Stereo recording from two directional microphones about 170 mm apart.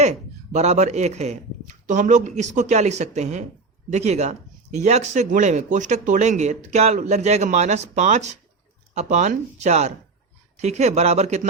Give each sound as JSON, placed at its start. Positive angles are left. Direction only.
{"t": 0.0, "sound": "speech", "side_deg": -40}